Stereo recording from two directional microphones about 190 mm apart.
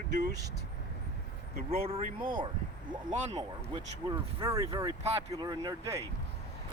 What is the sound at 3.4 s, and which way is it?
Speech, 20° right (ahead or behind).